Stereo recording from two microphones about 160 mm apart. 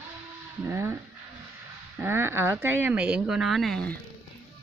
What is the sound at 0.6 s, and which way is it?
Speech, 15° right (ahead or behind).